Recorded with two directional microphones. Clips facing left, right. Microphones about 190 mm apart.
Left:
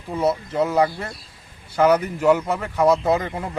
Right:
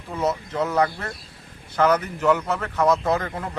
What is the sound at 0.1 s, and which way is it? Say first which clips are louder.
A man's voice: left 3 dB; 10° left (ahead or behind).